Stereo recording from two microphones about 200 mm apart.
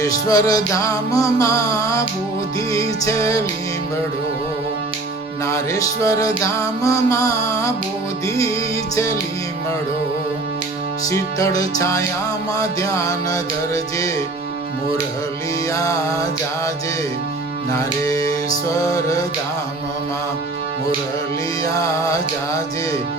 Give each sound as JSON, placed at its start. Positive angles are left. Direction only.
{"t": 0.0, "sound": "music", "side_deg": 15}
{"t": 3.0, "sound": "music", "side_deg": 15}
{"t": 5.5, "sound": "music", "side_deg": 15}
{"t": 11.1, "sound": "music", "side_deg": 15}
{"t": 15.7, "sound": "music", "side_deg": 15}
{"t": 17.7, "sound": "music", "side_deg": 15}
{"t": 21.6, "sound": "music", "side_deg": 15}